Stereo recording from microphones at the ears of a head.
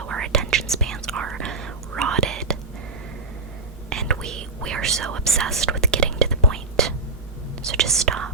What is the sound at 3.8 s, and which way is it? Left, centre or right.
Whispering, right.